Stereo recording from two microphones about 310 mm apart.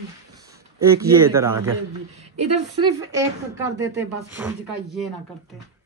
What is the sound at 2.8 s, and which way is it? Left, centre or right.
Speech, centre.